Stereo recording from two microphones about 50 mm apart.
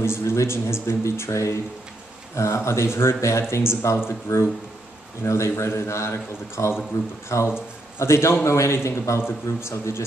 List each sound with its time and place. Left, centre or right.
0.0 s a man's voice: left
7.3 s speech: left
8.0 s a man's voice: left